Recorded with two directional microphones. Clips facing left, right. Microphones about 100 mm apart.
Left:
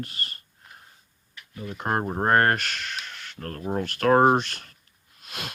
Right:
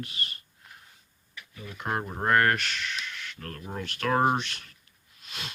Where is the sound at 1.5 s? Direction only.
40° left (ahead or behind).